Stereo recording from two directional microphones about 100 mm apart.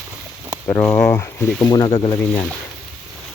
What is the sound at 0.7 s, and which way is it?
Speech, 30° left (ahead or behind).